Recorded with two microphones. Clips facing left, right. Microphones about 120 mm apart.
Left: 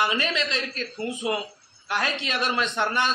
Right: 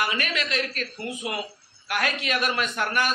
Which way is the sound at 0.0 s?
25° left (ahead or behind).